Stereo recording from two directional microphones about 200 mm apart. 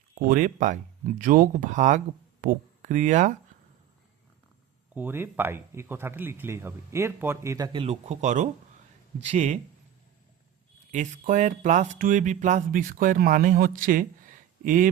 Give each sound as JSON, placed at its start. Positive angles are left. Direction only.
{"t": 0.2, "sound": "speech", "side_deg": -45}
{"t": 4.9, "sound": "speech", "side_deg": -10}
{"t": 10.9, "sound": "speech", "side_deg": -40}